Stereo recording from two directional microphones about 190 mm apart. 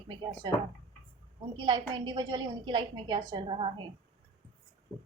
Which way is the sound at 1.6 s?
20° right (ahead or behind).